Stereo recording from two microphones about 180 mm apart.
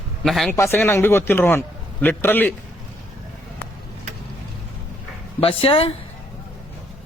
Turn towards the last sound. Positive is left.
turn(degrees=30)  # may be behind; listen again after turning